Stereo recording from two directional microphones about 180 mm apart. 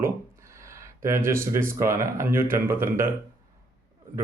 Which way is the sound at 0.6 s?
15° right (ahead or behind).